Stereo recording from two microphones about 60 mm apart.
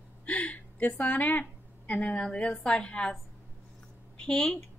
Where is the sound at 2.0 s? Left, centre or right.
Centre.